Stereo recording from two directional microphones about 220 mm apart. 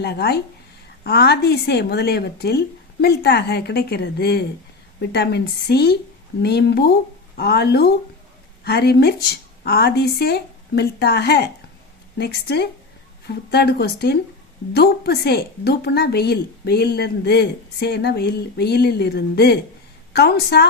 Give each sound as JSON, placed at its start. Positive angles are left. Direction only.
{"t": 0.0, "sound": "a woman's voice", "side_deg": 45}